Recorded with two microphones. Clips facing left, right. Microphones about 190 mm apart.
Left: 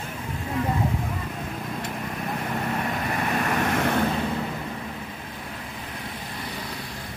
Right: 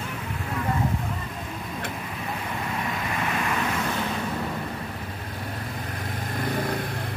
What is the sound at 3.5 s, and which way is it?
Vehicle, 60° left (ahead or behind).